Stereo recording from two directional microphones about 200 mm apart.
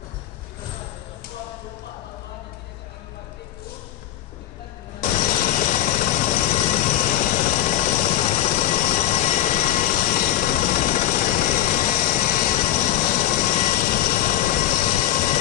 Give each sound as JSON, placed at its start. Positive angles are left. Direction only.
{"t": 5.0, "sound": "engine", "side_deg": 40}
{"t": 7.2, "sound": "vehicle", "side_deg": 40}